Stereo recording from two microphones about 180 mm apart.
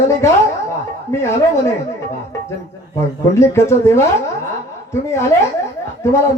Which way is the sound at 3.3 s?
15° left (ahead or behind).